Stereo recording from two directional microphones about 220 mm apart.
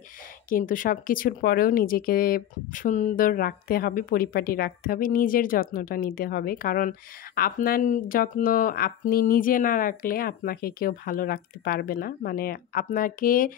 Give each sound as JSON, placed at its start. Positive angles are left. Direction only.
{"t": 0.5, "sound": "speech", "side_deg": 40}